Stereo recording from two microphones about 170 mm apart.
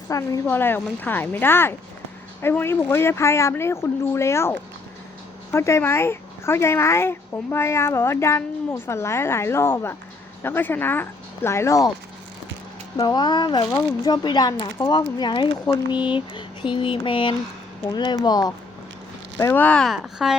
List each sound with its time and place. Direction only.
0.1 s speech: 20° left (ahead or behind)
13.0 s speech: 25° left (ahead or behind)
19.4 s speech: 10° left (ahead or behind)